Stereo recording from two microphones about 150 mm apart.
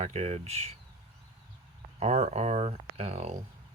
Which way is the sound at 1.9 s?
45° right (ahead or behind).